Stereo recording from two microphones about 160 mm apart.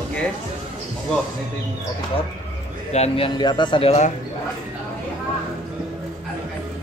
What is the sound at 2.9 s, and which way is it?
Speech, 40° left (ahead or behind).